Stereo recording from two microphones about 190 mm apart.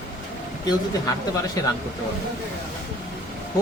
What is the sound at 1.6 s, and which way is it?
Speech, 20° left (ahead or behind).